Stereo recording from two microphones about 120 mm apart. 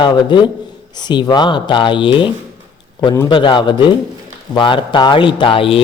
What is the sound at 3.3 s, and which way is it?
Speech, 40° left (ahead or behind).